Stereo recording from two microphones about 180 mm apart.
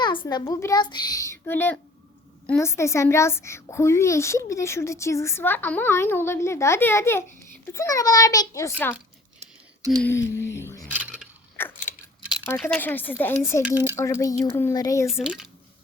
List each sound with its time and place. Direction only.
0.0 s a child's voice: 25° left (ahead or behind)
10.0 s speech: 15° left (ahead or behind)
10.8 s a sound: 10° right (ahead or behind)
11.6 s a sound: 10° left (ahead or behind)
12.6 s a child's voice: 10° left (ahead or behind)
13.7 s speech: 10° right (ahead or behind)
13.9 s a child's voice: 15° left (ahead or behind)
15.2 s speech: 5° right (ahead or behind)